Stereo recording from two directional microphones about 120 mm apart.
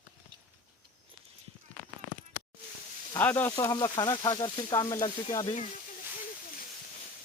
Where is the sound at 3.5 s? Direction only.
30° left (ahead or behind).